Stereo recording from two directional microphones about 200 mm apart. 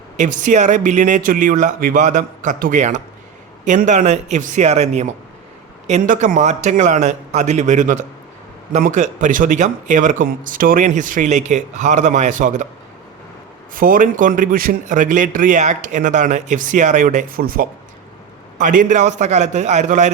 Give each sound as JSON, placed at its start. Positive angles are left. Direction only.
{"t": 0.2, "sound": "a man's voice", "side_deg": -40}
{"t": 13.7, "sound": "a man's voice", "side_deg": -45}